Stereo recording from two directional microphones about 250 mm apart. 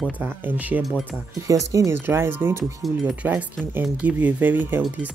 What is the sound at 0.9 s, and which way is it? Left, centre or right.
Speech, centre.